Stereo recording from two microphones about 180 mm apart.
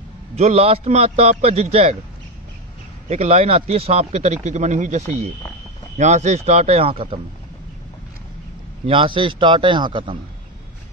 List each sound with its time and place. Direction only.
0.4 s a man's voice: 35° right (ahead or behind)
3.1 s a man's voice: 35° right (ahead or behind)
8.8 s a man's voice: 30° right (ahead or behind)